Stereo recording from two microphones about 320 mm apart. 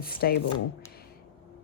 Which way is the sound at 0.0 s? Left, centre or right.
Left.